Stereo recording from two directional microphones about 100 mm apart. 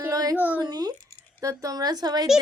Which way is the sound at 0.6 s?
40° right (ahead or behind).